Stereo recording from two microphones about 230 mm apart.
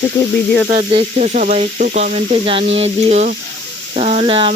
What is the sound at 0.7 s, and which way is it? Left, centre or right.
Sizzle, right.